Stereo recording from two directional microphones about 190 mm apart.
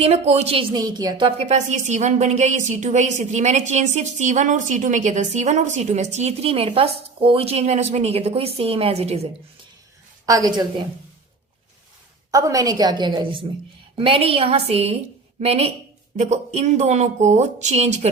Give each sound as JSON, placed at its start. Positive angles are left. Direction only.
{"t": 0.0, "sound": "a woman's voice", "side_deg": -35}
{"t": 10.2, "sound": "a woman's voice", "side_deg": -20}
{"t": 12.3, "sound": "a woman's voice", "side_deg": -20}